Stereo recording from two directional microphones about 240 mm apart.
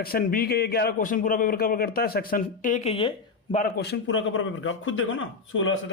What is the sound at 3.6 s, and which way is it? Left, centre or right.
A man's voice, left.